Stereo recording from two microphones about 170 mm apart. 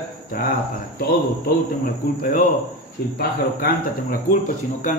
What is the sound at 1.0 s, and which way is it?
Speech, 65° left (ahead or behind).